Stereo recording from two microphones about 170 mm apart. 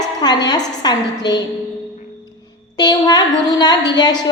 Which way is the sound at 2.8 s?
25° left (ahead or behind).